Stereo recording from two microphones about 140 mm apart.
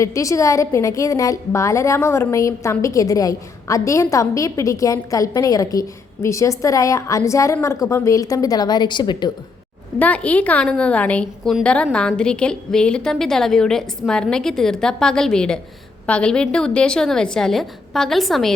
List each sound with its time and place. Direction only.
0.0 s a woman's voice: 20° left (ahead or behind)
10.0 s a woman's voice: 10° left (ahead or behind)